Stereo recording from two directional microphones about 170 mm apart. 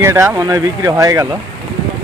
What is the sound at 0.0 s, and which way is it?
Speech, 15° right (ahead or behind).